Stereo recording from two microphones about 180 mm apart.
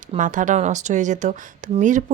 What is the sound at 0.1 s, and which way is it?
A woman's voice, 45° right (ahead or behind).